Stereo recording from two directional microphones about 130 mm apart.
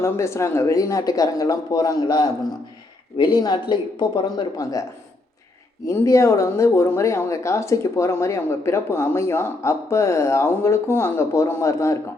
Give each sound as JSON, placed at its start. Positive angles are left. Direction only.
{"t": 0.0, "sound": "speech", "side_deg": 20}
{"t": 4.5, "sound": "speech", "side_deg": 25}